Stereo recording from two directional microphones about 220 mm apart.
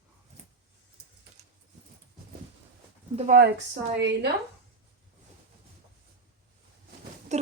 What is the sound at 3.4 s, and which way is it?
Speech, 55° right (ahead or behind).